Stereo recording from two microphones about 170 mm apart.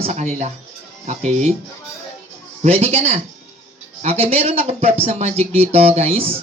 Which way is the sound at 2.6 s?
35° right (ahead or behind).